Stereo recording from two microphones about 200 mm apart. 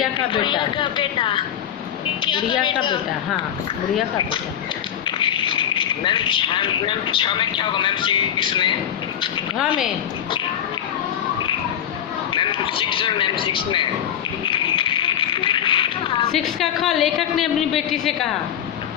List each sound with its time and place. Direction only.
0.3 s a woman's voice: 25° left (ahead or behind)
5.0 s speech: 25° left (ahead or behind)
12.3 s a sound: 25° left (ahead or behind)
14.4 s speech: 25° left (ahead or behind)
16.3 s a woman's voice: centre (ahead or behind)